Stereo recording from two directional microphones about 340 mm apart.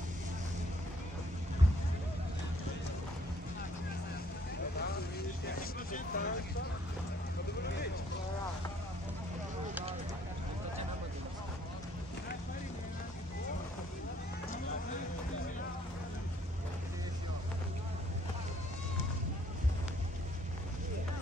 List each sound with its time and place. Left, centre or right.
5.4 s vehicle: left
7.6 s vehicle: left